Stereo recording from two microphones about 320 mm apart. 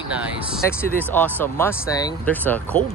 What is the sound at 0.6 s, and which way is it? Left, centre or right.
Speech, centre.